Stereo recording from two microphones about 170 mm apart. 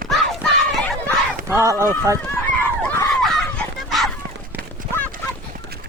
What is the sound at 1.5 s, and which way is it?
Speech, 15° right (ahead or behind).